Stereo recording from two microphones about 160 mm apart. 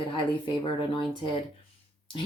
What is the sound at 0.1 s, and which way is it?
Speech, 30° left (ahead or behind).